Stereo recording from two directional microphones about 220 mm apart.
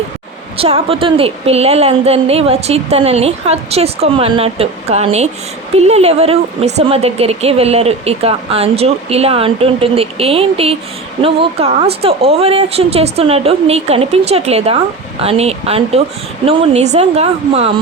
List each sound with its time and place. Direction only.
0.5 s speech: 25° right (ahead or behind)